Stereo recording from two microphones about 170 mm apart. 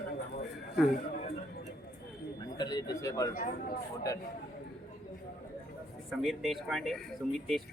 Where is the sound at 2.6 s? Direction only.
25° left (ahead or behind).